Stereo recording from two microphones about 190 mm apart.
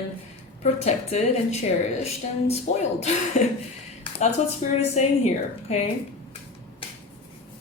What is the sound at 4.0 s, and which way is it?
Speech, 35° left (ahead or behind).